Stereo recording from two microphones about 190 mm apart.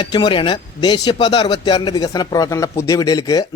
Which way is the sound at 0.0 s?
25° left (ahead or behind).